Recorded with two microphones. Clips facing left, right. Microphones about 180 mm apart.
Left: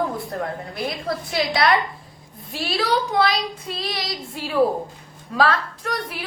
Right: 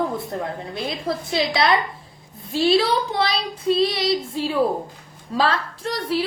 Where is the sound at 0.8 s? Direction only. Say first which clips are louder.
Right 1 dB; 25° right (ahead or behind).